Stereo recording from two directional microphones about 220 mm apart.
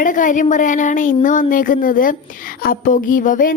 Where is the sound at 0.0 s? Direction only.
35° left (ahead or behind).